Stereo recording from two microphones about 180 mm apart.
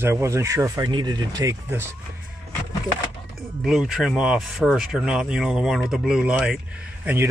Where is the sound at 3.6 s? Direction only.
Centre (ahead or behind).